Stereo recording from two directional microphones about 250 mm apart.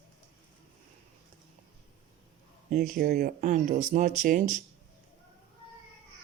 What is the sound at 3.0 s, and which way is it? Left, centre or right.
Speech, right.